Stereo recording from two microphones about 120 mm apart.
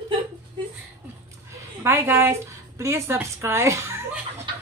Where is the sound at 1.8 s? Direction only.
20° right (ahead or behind).